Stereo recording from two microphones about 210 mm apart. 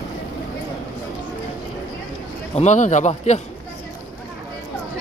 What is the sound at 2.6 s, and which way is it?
Speech, 35° left (ahead or behind).